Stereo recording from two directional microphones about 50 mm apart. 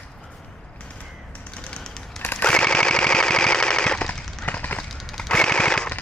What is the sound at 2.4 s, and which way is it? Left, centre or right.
Machine gun, left.